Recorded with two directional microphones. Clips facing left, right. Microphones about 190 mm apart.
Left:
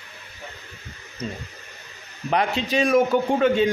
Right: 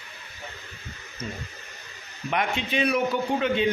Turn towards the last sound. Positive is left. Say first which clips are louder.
# left 5 dB
turn(degrees=45)  # may be behind; listen again after turning